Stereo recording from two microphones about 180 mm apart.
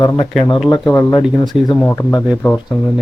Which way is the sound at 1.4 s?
25° left (ahead or behind).